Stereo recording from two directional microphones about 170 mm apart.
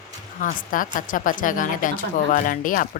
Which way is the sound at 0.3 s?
50° left (ahead or behind).